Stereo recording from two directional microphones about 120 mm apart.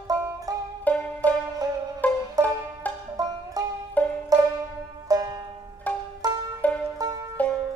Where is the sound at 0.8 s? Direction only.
15° left (ahead or behind).